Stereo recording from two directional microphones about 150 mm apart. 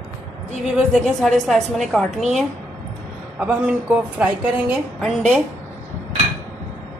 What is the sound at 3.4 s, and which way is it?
A woman's voice, 10° right (ahead or behind).